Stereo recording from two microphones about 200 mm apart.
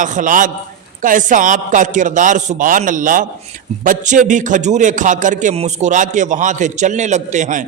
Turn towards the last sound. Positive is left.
turn(degrees=-40)  # may be behind; listen again after turning